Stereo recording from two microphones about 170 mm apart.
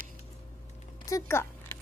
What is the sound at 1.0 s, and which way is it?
Speech, 15° left (ahead or behind).